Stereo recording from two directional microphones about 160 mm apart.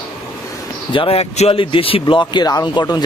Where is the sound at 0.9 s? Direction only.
35° left (ahead or behind).